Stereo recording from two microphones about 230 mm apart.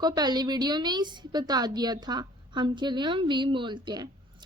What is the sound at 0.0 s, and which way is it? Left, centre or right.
A woman's voice, centre.